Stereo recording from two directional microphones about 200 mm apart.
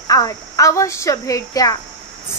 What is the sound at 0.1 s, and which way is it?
A child's voice, 15° left (ahead or behind).